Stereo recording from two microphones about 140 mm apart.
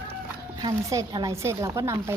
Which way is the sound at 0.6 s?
25° right (ahead or behind).